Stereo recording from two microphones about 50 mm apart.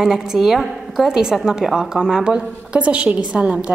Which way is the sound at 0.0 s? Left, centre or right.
Centre.